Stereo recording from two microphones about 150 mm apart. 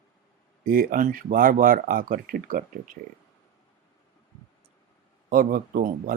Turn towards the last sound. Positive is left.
turn(degrees=-70)  # may be behind; listen again after turning